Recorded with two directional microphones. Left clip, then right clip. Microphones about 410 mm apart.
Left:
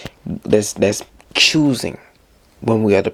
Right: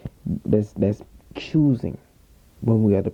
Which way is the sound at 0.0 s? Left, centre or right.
Centre.